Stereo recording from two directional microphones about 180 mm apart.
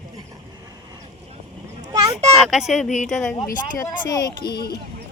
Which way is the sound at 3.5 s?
20° left (ahead or behind).